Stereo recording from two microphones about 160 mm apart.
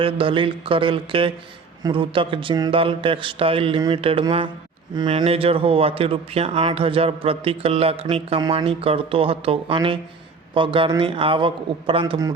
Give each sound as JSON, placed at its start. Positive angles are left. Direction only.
{"t": 0.0, "sound": "speech", "side_deg": -35}